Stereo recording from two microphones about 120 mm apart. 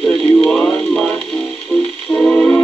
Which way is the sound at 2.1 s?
15° left (ahead or behind).